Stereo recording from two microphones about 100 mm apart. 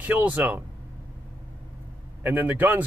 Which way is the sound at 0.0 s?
15° right (ahead or behind).